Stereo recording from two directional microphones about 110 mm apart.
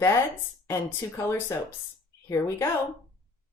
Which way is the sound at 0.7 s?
25° left (ahead or behind).